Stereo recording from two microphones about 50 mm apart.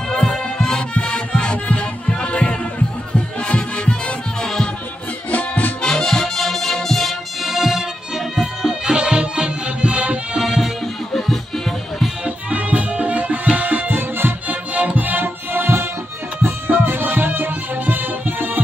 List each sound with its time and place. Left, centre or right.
0.1 s music: centre
4.4 s music: centre
5.3 s music: left
5.8 s music: centre
8.9 s music: centre
10.3 s music: centre
11.1 s music: centre
12.3 s music: right
14.7 s music: right